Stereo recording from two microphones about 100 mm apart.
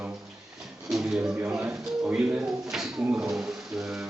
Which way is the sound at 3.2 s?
5° right (ahead or behind).